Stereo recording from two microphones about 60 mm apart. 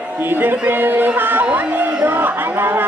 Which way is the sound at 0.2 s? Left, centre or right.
Right.